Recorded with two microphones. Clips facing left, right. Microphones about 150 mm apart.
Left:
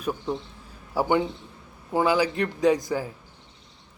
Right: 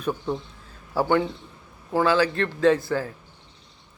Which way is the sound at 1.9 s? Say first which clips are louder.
Right 1 dB; 15° left (ahead or behind).